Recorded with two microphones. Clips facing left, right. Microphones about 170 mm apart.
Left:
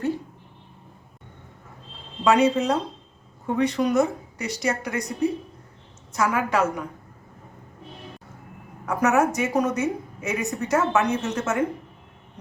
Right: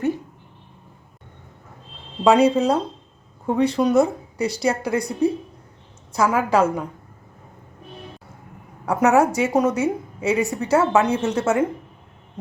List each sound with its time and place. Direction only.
2.2 s a woman's voice: 30° right (ahead or behind)
8.9 s a woman's voice: 30° right (ahead or behind)